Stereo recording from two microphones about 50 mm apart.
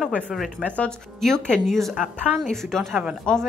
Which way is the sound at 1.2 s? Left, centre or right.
Centre.